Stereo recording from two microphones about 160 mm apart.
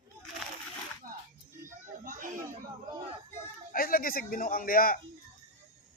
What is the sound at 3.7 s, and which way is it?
Speech, 60° left (ahead or behind).